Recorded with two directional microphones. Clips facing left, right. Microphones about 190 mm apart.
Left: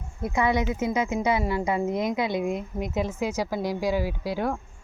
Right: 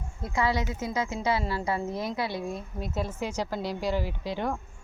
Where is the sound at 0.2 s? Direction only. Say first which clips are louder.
Left 4 dB; 20° left (ahead or behind).